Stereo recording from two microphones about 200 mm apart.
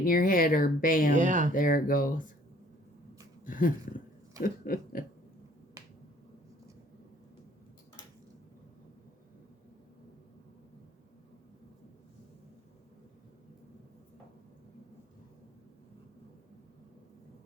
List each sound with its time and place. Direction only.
0.0 s speech: 45° left (ahead or behind)
1.1 s speech: 40° right (ahead or behind)
1.5 s speech: 45° left (ahead or behind)
3.4 s speech: 40° left (ahead or behind)